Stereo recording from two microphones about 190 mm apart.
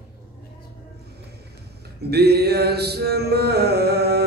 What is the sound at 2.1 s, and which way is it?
Mantra, 55° right (ahead or behind).